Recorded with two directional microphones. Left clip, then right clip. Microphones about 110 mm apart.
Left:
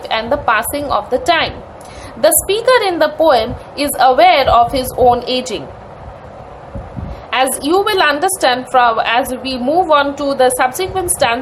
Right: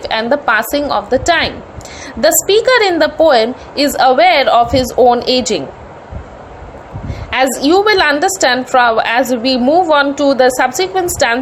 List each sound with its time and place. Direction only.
0.0 s a woman's voice: 30° right (ahead or behind)
7.3 s a woman's voice: 35° right (ahead or behind)